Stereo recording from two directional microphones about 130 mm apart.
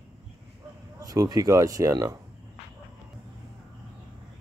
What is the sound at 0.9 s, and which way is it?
Speech, 25° right (ahead or behind).